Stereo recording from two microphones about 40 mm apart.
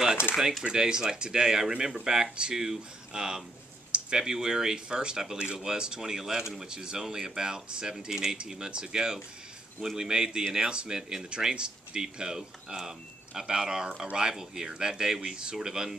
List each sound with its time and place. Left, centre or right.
0.7 s speech: centre
11.2 s speech: right